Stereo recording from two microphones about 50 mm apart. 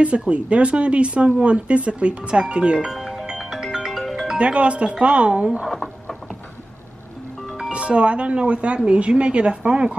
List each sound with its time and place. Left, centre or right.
0.3 s speech: right
2.9 s music: centre
4.4 s speech: right
5.7 s a sound: centre
7.7 s speech: right